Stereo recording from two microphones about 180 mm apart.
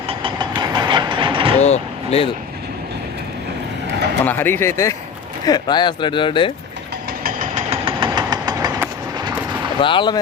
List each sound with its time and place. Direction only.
0.1 s train: 30° right (ahead or behind)
1.5 s vehicle: 40° left (ahead or behind)
4.3 s speech: 10° left (ahead or behind); by 6.5 s 25° left (ahead or behind)
7.3 s vehicle: 45° right (ahead or behind)
7.9 s vehicle: 25° right (ahead or behind)
9.8 s speech: 25° left (ahead or behind)